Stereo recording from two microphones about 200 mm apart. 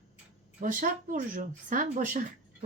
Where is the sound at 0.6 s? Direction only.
40° right (ahead or behind).